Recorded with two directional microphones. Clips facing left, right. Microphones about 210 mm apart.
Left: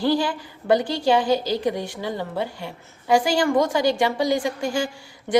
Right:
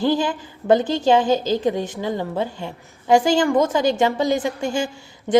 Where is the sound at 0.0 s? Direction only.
20° right (ahead or behind).